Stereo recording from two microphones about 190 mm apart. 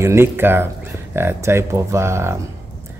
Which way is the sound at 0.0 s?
15° right (ahead or behind).